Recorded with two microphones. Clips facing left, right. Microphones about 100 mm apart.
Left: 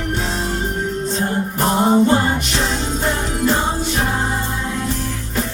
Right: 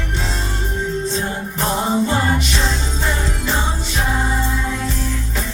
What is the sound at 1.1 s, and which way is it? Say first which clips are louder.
Music: left 3 dB; 50° left (ahead or behind).